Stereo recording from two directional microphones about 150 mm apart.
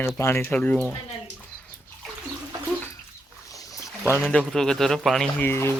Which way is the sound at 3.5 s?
20° left (ahead or behind).